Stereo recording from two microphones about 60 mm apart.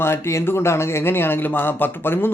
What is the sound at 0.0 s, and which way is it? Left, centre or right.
Speech, left.